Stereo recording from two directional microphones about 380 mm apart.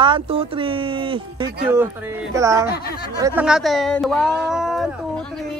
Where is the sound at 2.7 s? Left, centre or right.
Left.